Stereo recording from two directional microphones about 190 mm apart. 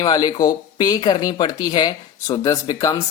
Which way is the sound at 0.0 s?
20° left (ahead or behind).